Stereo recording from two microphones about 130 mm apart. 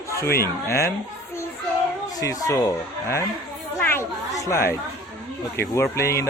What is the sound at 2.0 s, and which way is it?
Speech, 25° left (ahead or behind).